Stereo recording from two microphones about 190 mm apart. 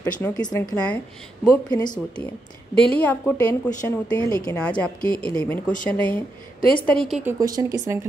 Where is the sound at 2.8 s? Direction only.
5° left (ahead or behind).